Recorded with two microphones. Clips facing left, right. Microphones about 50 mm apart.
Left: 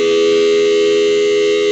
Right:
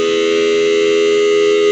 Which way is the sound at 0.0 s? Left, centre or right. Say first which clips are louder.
Left 2 dB; right.